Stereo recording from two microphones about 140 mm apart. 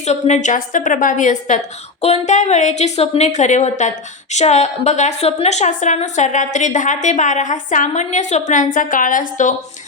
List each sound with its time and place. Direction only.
0.0 s a woman's voice: 55° left (ahead or behind)